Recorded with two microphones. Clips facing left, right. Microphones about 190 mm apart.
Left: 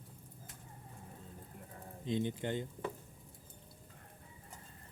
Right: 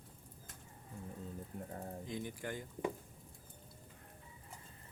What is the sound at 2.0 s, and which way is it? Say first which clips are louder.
Speech: left 10 dB; 25° left (ahead or behind).